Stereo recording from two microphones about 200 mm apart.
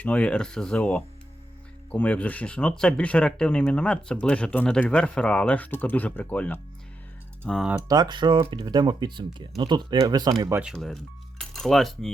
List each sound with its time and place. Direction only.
0.0 s speech: 5° left (ahead or behind)
7.9 s speech: 20° right (ahead or behind)
10.6 s cutlery: centre (ahead or behind)